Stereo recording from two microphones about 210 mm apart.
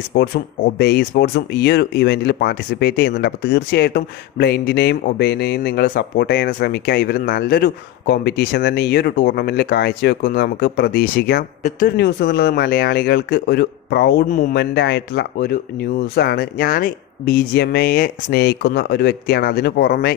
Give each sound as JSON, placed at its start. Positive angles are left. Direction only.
{"t": 0.1, "sound": "speech", "side_deg": 50}
{"t": 14.5, "sound": "speech", "side_deg": 55}